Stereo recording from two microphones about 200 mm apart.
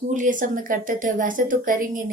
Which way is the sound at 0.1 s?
40° right (ahead or behind).